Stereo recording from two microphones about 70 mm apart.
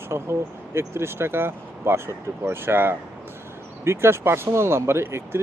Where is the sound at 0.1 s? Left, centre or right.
Right.